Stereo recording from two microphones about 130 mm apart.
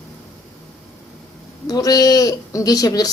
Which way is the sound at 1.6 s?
30° left (ahead or behind).